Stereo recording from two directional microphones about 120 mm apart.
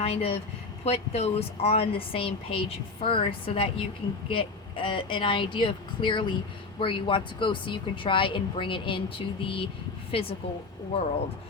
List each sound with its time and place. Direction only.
0.0 s speech: 55° left (ahead or behind)